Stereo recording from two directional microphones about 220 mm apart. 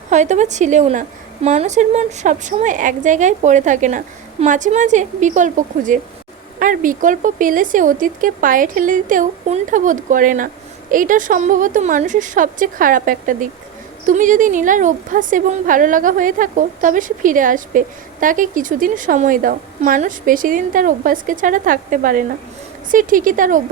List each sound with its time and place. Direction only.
0.1 s a woman's voice: 30° right (ahead or behind)